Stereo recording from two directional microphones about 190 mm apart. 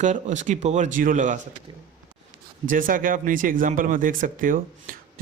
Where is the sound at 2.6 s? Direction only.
45° right (ahead or behind).